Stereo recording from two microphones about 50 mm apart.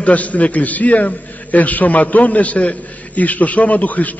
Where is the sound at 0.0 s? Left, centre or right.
Left.